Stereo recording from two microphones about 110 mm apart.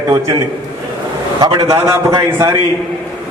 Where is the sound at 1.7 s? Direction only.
25° right (ahead or behind).